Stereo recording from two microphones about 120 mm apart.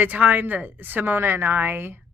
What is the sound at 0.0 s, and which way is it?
A woman's voice, 15° right (ahead or behind).